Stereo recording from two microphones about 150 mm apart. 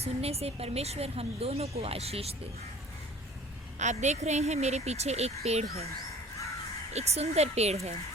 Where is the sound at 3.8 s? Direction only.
50° right (ahead or behind).